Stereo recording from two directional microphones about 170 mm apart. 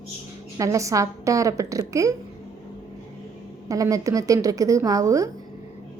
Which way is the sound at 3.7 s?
20° right (ahead or behind).